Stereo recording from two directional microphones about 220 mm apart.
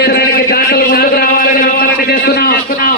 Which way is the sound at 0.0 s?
45° left (ahead or behind).